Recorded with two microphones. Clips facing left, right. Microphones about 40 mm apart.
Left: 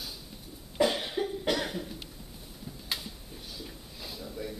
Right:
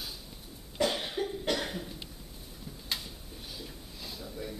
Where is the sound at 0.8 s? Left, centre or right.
Centre.